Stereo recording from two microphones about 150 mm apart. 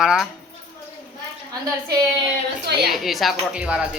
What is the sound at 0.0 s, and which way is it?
Speech, 5° right (ahead or behind).